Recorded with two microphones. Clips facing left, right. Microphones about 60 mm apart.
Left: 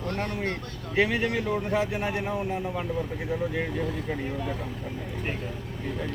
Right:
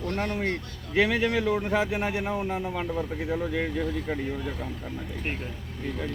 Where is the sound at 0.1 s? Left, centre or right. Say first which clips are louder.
Right 2 dB; right.